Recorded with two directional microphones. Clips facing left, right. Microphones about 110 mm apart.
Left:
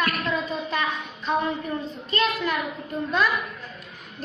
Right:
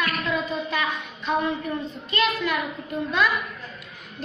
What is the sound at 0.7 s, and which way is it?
Child singing, 35° left (ahead or behind).